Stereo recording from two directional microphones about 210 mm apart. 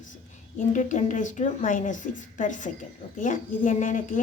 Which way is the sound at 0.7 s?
35° left (ahead or behind).